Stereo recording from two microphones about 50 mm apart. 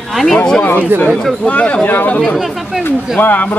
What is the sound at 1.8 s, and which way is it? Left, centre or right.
Speech, left.